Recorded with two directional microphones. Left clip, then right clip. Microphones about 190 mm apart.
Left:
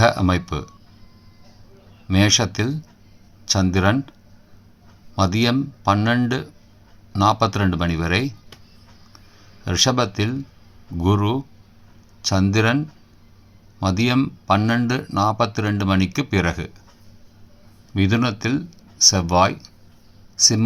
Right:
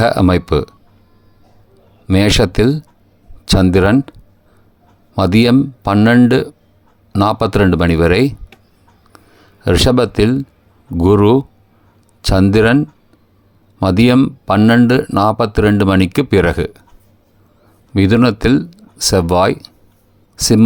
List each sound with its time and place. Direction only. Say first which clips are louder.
0.0 s speech: right 5 dB; 45° right (ahead or behind)
2.0 s speech: right 6 dB; 50° right (ahead or behind)
5.1 s speech: right 8 dB; 50° right (ahead or behind)
9.6 s speech: right 7 dB; 50° right (ahead or behind)
17.9 s speech: right 9 dB; 50° right (ahead or behind)